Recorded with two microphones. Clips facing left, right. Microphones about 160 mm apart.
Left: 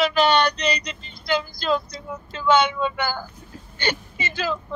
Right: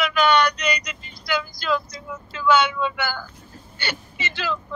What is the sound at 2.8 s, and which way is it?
Speech, 35° left (ahead or behind).